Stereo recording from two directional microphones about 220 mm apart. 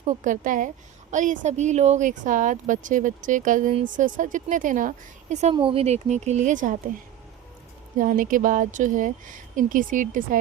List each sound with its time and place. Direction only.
0.0 s speech: 35° right (ahead or behind)
7.9 s speech: 40° right (ahead or behind)